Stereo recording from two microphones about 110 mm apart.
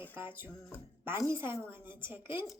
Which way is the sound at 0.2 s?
20° right (ahead or behind).